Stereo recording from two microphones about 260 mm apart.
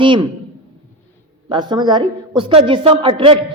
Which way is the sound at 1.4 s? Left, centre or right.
Centre.